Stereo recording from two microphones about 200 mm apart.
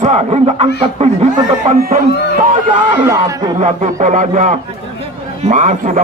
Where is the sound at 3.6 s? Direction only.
40° right (ahead or behind).